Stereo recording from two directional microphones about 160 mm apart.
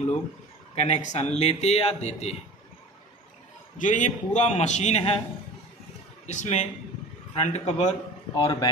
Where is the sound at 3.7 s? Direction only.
50° left (ahead or behind).